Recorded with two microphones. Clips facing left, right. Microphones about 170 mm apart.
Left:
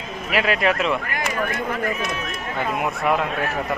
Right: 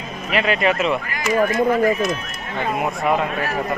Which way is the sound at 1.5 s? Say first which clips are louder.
Right 9 dB; 40° right (ahead or behind).